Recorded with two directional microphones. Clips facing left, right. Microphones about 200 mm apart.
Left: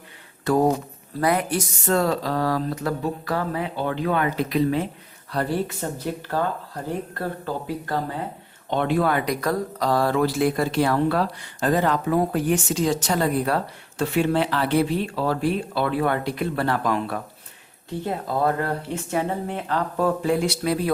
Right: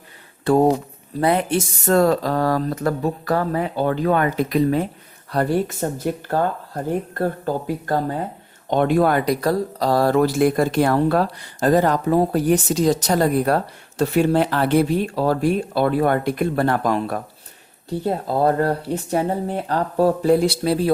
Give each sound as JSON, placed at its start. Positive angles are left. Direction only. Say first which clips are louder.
{"t": 0.4, "sound": "a woman's voice", "louder": "right 4 dB", "side_deg": -25}
{"t": 1.9, "sound": "speech", "louder": "right 5 dB", "side_deg": -45}
{"t": 18.0, "sound": "speech", "louder": "right 4 dB", "side_deg": -35}